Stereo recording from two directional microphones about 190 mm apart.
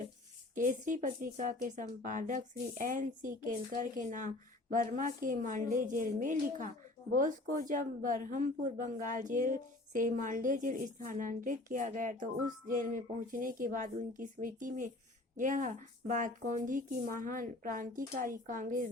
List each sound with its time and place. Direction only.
0.5 s a woman's voice: 40° right (ahead or behind)